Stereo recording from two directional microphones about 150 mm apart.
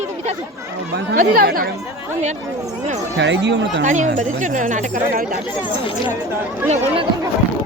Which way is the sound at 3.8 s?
55° right (ahead or behind).